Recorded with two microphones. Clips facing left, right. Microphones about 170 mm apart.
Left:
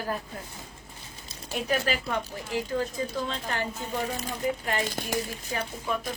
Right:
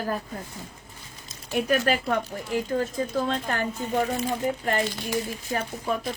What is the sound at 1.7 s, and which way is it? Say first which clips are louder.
Speech: right 4 dB; 55° right (ahead or behind).